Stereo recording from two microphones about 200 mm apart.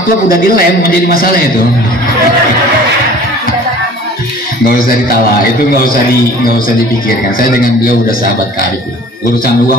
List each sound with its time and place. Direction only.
0.3 s a man's voice: 45° left (ahead or behind)
4.6 s a man's voice: 45° left (ahead or behind)